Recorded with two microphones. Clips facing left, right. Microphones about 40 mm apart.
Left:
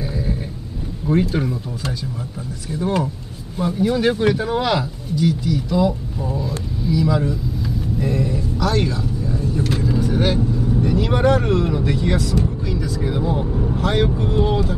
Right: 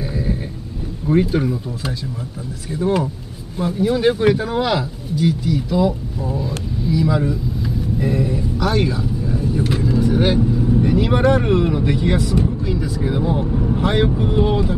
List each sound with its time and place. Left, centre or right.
1.0 s speech: centre
2.8 s speech: centre
12.4 s vehicle: centre
13.7 s speech: centre
14.0 s speech: centre